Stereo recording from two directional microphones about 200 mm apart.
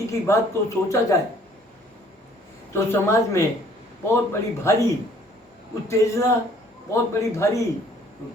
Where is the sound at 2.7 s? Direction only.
15° left (ahead or behind).